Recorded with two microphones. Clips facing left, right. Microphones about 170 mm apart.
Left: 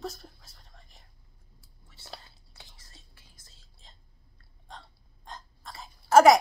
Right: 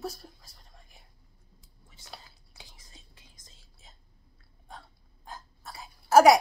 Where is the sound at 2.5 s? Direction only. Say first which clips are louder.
Right 1 dB; 10° right (ahead or behind).